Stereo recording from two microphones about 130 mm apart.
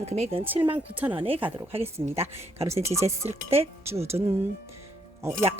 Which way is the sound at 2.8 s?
20° right (ahead or behind).